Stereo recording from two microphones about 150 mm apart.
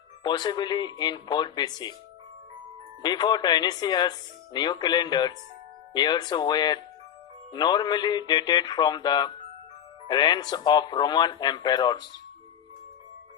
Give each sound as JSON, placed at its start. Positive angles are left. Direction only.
{"t": 0.2, "sound": "speech", "side_deg": 30}
{"t": 3.0, "sound": "speech", "side_deg": 30}